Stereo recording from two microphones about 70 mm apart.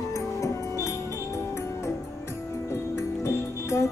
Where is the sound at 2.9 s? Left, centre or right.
Left.